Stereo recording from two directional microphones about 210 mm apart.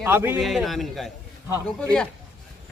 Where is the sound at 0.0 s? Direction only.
10° right (ahead or behind).